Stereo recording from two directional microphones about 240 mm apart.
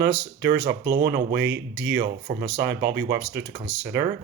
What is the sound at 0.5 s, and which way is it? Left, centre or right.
Speech, right.